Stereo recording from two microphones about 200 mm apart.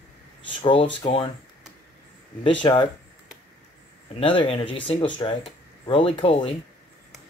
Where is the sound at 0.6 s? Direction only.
25° left (ahead or behind).